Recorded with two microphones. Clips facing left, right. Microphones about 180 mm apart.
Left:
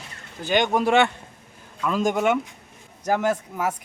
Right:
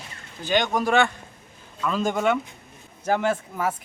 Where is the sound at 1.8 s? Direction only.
10° left (ahead or behind).